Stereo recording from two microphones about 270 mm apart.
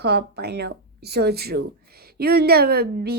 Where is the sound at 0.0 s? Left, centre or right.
Right.